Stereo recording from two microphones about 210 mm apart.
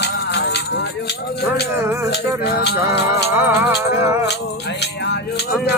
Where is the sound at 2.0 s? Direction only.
50° left (ahead or behind).